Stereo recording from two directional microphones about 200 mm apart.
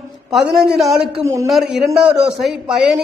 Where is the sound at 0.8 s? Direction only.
Centre (ahead or behind).